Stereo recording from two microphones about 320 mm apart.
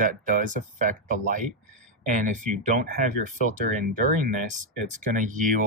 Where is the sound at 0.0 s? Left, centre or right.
Right.